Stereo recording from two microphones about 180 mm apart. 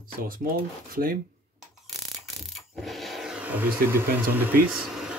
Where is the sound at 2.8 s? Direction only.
Centre (ahead or behind).